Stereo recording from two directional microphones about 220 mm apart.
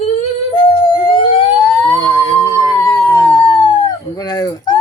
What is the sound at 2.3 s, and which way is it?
Howl, 15° left (ahead or behind).